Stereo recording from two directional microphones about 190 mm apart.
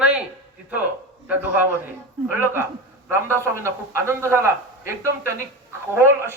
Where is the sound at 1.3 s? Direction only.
10° right (ahead or behind).